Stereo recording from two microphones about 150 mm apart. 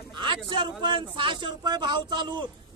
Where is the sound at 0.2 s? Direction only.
30° right (ahead or behind).